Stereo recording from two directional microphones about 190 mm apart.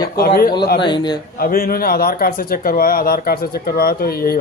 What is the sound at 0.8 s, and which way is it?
Speech, 25° left (ahead or behind).